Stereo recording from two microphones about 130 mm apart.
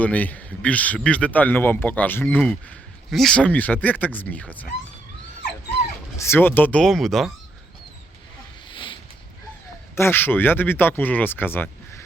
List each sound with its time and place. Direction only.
0.0 s speech: 10° left (ahead or behind)
6.1 s speech: 20° left (ahead or behind); by 7.3 s centre (ahead or behind)
8.6 s a sound: 40° left (ahead or behind)
9.9 s speech: 20° left (ahead or behind)